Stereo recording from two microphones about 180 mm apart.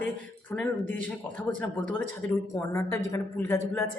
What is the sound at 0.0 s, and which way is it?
A woman's voice, 10° left (ahead or behind).